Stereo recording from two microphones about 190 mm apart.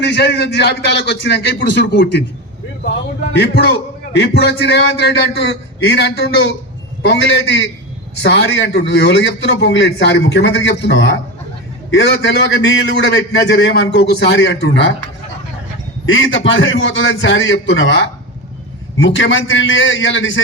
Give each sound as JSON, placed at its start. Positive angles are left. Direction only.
{"t": 0.0, "sound": "a man's voice", "side_deg": 65}
{"t": 3.3, "sound": "a man's voice", "side_deg": 60}
{"t": 16.0, "sound": "a man's voice", "side_deg": 90}